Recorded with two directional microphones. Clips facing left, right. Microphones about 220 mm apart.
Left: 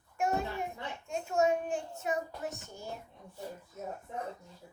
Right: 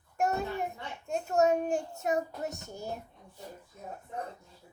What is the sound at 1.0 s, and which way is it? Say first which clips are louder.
A child's voice: right 3 dB; 40° right (ahead or behind).